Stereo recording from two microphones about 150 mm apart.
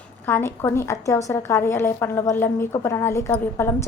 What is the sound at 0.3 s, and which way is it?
A woman's voice, 15° left (ahead or behind).